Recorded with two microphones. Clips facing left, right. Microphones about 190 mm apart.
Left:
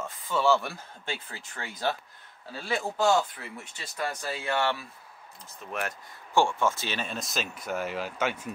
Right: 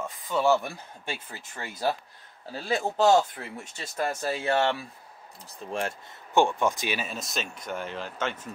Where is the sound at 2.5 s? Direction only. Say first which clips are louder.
Right 3 dB; 40° right (ahead or behind).